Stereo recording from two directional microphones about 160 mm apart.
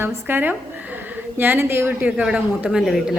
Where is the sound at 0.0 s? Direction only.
10° right (ahead or behind).